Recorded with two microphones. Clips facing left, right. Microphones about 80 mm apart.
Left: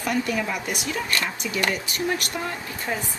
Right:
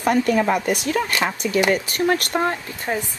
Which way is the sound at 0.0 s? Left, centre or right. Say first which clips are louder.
Right 7 dB; right.